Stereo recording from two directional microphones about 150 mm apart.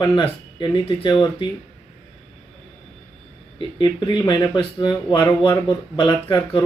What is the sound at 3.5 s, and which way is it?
Speech, 30° left (ahead or behind).